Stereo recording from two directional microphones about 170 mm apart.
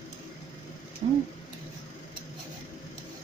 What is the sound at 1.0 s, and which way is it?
Speech, 50° right (ahead or behind).